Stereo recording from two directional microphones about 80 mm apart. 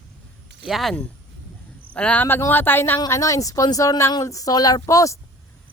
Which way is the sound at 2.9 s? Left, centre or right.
Left.